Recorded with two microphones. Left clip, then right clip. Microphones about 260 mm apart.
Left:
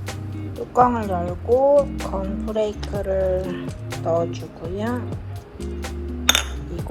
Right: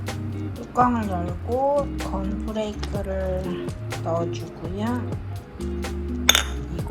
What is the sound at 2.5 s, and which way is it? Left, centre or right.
Music, left.